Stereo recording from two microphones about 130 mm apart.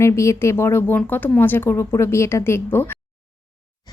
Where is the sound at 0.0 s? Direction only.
20° left (ahead or behind).